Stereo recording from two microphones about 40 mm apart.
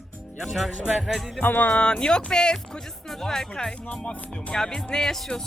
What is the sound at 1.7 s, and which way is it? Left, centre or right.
Speech, left.